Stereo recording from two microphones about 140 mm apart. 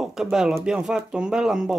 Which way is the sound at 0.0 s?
Centre (ahead or behind).